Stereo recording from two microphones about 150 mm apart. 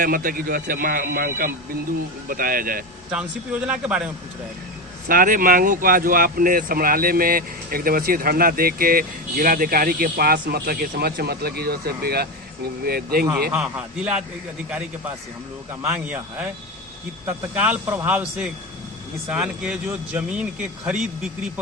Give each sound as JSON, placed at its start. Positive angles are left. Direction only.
{"t": 0.0, "sound": "speech", "side_deg": -70}
{"t": 3.1, "sound": "speech", "side_deg": -5}
{"t": 5.0, "sound": "speech", "side_deg": -70}
{"t": 13.5, "sound": "speech", "side_deg": -5}
{"t": 15.8, "sound": "speech", "side_deg": -15}